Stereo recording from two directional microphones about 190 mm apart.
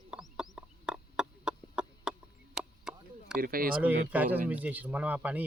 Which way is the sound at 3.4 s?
50° right (ahead or behind).